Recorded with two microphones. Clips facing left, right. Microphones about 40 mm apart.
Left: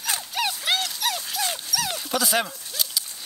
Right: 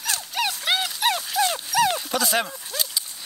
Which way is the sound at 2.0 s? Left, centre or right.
Centre.